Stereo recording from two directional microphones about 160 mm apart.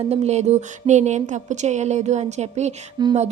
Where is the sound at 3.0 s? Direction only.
25° right (ahead or behind).